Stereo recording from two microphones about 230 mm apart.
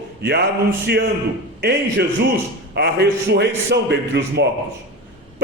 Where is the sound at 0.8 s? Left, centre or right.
Right.